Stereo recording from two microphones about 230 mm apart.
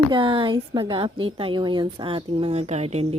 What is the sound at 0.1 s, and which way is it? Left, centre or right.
A woman's voice, right.